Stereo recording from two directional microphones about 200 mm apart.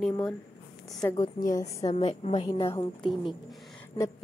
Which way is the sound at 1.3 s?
45° left (ahead or behind).